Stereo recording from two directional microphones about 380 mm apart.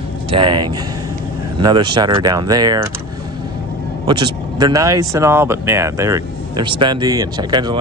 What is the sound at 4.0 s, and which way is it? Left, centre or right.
Speech, centre.